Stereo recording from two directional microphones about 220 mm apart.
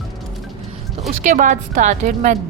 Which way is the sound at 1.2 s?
35° right (ahead or behind).